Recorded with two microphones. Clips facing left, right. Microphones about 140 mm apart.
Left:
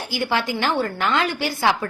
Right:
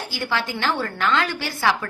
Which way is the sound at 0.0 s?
15° left (ahead or behind).